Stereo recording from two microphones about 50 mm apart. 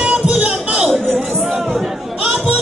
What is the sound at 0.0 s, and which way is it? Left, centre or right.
Music, centre.